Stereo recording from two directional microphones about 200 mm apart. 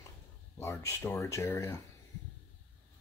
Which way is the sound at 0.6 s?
15° left (ahead or behind).